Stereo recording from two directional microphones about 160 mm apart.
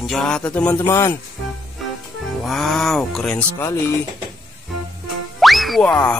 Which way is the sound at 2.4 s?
Centre (ahead or behind).